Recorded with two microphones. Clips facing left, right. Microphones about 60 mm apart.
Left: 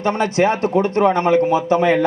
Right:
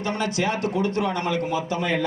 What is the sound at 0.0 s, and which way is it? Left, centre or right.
A man's voice, left.